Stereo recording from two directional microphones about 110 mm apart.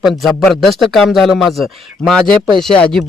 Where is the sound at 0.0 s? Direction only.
Centre (ahead or behind).